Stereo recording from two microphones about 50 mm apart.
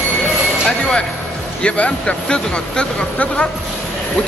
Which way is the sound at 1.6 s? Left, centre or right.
Left.